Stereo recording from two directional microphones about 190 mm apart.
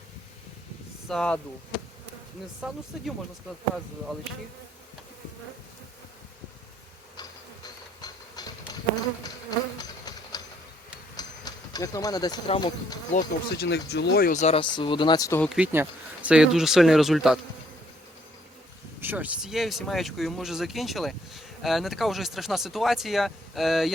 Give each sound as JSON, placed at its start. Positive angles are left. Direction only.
{"t": 1.0, "sound": "speech", "side_deg": 5}
{"t": 2.6, "sound": "speech", "side_deg": 0}
{"t": 9.2, "sound": "insect", "side_deg": 20}
{"t": 11.2, "sound": "speech", "side_deg": 20}
{"t": 13.1, "sound": "speech", "side_deg": 60}
{"t": 14.3, "sound": "speech", "side_deg": 30}
{"t": 15.4, "sound": "speech", "side_deg": -5}
{"t": 18.9, "sound": "speech", "side_deg": -10}